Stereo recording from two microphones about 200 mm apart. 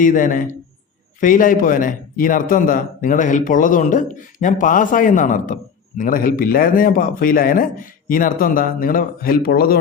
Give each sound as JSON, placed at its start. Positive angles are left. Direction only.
{"t": 0.0, "sound": "a man's voice", "side_deg": 40}